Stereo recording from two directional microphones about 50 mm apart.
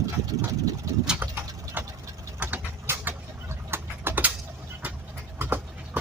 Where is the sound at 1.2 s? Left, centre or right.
Right.